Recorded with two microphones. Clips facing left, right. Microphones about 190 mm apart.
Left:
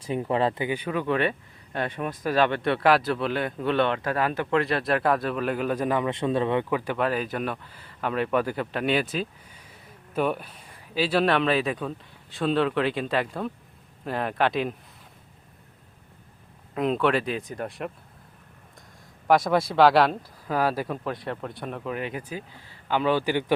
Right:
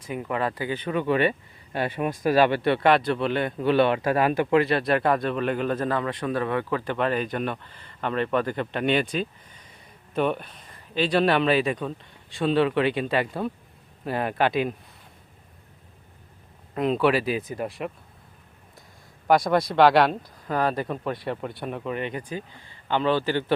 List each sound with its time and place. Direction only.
0.0 s speech: 30° left (ahead or behind)
0.9 s a man's voice: centre (ahead or behind)
4.6 s a man's voice: centre (ahead or behind)
16.7 s a man's voice: centre (ahead or behind)
19.3 s a man's voice: centre (ahead or behind)